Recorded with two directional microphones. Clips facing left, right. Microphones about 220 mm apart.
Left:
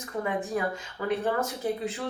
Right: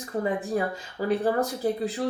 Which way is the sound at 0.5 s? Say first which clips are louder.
Right 2 dB; 35° right (ahead or behind).